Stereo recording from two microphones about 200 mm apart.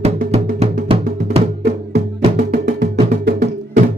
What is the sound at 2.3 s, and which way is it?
Wood block, 55° right (ahead or behind).